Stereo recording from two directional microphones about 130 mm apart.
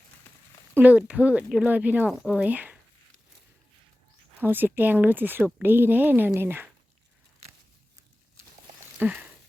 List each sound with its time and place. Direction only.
0.7 s speech: 15° right (ahead or behind)
4.4 s speech: 15° right (ahead or behind)
9.0 s a sound: 10° right (ahead or behind)